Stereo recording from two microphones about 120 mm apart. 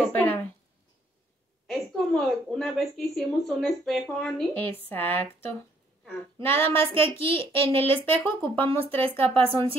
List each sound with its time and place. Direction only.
0.1 s a sound: 15° left (ahead or behind)
1.7 s a woman's voice: centre (ahead or behind)
4.6 s speech: 15° left (ahead or behind)
6.4 s child singing: 20° left (ahead or behind)
7.2 s speech: 50° right (ahead or behind)
8.0 s speech: 15° left (ahead or behind)
8.6 s speech: 50° right (ahead or behind)